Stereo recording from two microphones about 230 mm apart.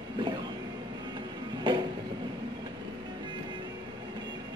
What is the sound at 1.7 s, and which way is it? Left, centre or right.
Vehicle, right.